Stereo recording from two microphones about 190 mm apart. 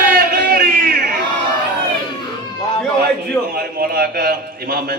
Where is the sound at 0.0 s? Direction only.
50° right (ahead or behind).